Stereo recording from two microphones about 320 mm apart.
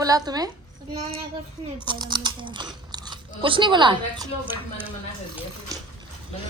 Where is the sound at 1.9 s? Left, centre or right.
Centre.